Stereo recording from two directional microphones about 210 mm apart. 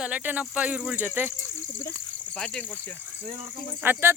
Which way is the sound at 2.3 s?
5° left (ahead or behind).